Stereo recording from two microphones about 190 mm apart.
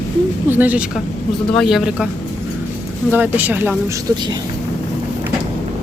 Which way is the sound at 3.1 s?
10° right (ahead or behind).